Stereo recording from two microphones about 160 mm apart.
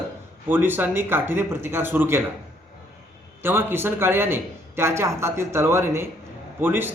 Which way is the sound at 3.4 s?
15° right (ahead or behind).